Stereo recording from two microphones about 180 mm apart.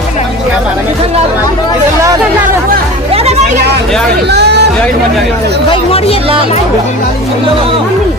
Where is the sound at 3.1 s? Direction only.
35° right (ahead or behind).